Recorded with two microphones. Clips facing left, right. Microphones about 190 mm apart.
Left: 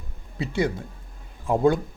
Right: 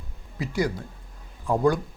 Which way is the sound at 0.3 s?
25° left (ahead or behind).